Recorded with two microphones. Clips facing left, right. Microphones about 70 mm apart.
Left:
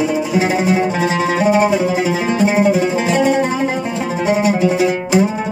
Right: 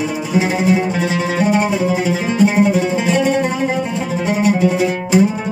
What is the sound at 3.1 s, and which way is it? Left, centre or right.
Music, left.